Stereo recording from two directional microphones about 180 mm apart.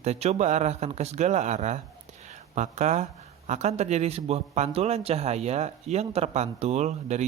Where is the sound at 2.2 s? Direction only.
40° right (ahead or behind).